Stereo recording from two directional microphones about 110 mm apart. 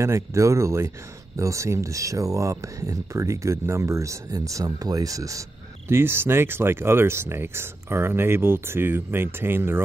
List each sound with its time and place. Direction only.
0.0 s speech: 25° right (ahead or behind)